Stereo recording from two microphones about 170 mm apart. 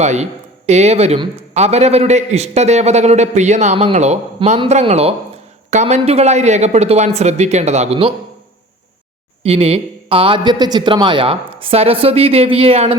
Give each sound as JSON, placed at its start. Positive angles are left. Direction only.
{"t": 0.0, "sound": "speech", "side_deg": -40}
{"t": 9.4, "sound": "speech", "side_deg": -35}